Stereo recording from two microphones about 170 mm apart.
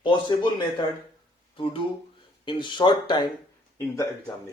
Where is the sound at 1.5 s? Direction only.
30° left (ahead or behind).